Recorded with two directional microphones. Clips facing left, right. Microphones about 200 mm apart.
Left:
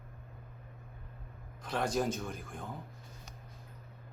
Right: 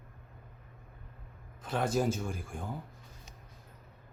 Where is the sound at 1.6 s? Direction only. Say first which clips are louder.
Right 2 dB; 5° right (ahead or behind).